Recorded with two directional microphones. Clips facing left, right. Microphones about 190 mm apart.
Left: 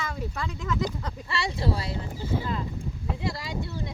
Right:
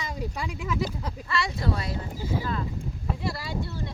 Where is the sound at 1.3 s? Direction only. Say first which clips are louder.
Even; 30° left (ahead or behind).